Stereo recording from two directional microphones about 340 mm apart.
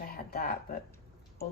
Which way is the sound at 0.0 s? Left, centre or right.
Left.